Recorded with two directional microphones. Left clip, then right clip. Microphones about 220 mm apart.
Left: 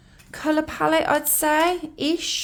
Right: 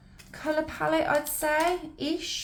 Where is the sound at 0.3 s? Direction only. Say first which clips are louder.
Left 6 dB; 50° left (ahead or behind).